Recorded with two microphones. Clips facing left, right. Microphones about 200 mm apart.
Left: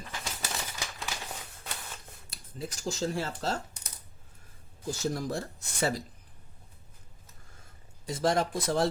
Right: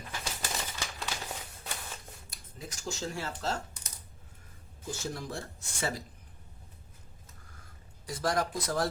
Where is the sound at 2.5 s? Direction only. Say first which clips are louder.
Left 5 dB; 35° left (ahead or behind).